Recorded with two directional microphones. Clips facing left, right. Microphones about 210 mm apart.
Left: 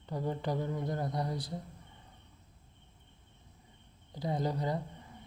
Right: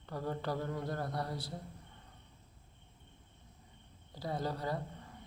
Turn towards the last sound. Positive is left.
turn(degrees=15)  # may be behind; listen again after turning